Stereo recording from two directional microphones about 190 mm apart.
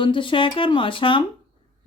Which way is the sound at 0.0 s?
25° left (ahead or behind).